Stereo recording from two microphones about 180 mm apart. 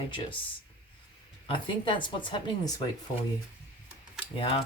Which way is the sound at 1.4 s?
25° left (ahead or behind).